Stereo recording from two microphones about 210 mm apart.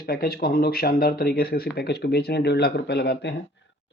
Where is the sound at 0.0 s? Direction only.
45° left (ahead or behind).